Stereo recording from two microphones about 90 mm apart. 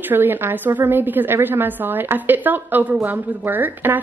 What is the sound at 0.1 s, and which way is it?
A woman's voice, 25° right (ahead or behind).